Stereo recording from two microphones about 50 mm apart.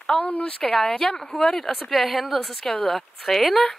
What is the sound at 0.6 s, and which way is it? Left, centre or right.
Speech, centre.